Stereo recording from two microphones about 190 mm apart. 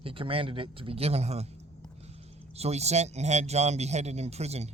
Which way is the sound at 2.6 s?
35° right (ahead or behind).